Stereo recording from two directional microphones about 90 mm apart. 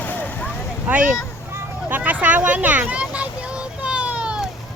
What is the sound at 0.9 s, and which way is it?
Speech, 20° right (ahead or behind).